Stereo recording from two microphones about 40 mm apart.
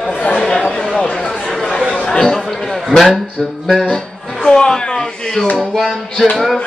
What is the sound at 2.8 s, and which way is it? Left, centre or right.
Speech, centre.